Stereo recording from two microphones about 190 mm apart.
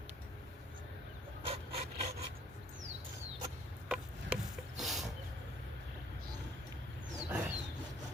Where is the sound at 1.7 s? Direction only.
35° right (ahead or behind).